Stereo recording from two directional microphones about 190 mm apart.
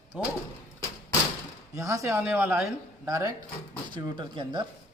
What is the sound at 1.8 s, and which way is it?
Speech, 15° right (ahead or behind).